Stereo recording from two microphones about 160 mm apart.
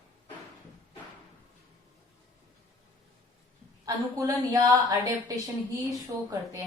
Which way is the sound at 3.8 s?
20° right (ahead or behind).